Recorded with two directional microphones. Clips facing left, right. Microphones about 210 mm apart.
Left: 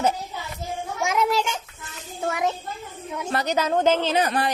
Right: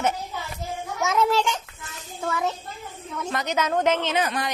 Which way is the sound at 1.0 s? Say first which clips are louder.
Right 1 dB; 10° left (ahead or behind).